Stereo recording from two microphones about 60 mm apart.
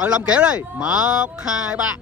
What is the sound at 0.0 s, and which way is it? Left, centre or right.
Speech, centre.